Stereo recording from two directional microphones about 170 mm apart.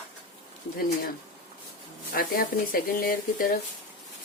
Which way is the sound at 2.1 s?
60° left (ahead or behind).